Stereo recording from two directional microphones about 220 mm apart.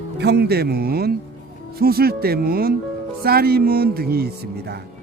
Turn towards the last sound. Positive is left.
turn(degrees=-45)  # may be behind; listen again after turning